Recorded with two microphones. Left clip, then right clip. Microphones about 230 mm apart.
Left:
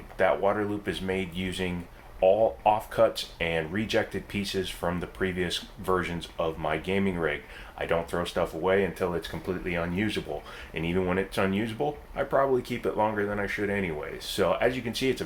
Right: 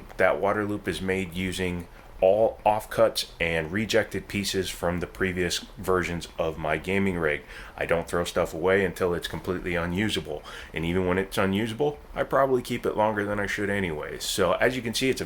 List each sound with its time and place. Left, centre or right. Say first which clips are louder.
0.2 s speech: right 1 dB; right